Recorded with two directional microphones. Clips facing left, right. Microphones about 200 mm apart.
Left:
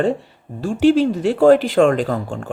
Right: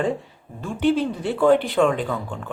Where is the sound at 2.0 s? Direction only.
50° left (ahead or behind).